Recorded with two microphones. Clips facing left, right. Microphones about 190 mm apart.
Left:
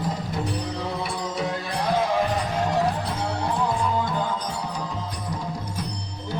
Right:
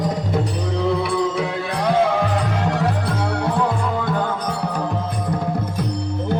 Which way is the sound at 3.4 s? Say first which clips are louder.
Right 3 dB; 65° right (ahead or behind).